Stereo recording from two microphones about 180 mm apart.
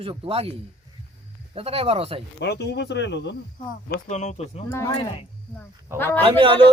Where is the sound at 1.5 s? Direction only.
35° right (ahead or behind).